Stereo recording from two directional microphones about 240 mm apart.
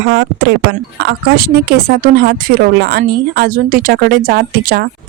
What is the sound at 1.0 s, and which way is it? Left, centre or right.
A woman's voice, right.